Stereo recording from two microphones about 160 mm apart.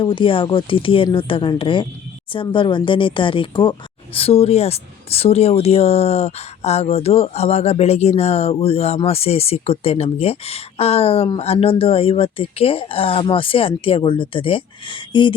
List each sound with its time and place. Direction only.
0.0 s speech: 30° left (ahead or behind)